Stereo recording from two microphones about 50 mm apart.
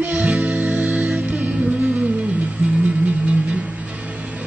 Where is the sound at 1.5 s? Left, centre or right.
Right.